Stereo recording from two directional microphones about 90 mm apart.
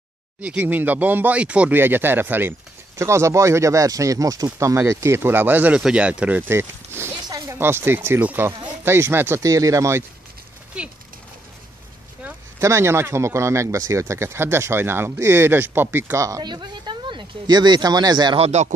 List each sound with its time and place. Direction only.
0.4 s speech: 20° right (ahead or behind)
1.8 s speech: 25° right (ahead or behind)
5.8 s speech: 10° right (ahead or behind)
6.5 s speech: 25° right (ahead or behind)
7.2 s a sound: 40° right (ahead or behind)
7.5 s speech: 25° right (ahead or behind)
9.4 s speech: 35° right (ahead or behind)
10.8 s speech: 10° right (ahead or behind)
12.5 s speech: 30° right (ahead or behind)
16.4 s speech: 55° right (ahead or behind)